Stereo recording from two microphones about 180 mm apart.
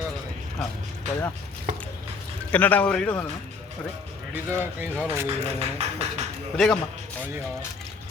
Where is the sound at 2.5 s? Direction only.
10° left (ahead or behind).